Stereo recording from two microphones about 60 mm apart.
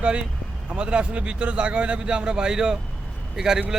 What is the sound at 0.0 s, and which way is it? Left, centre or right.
A man's voice, centre.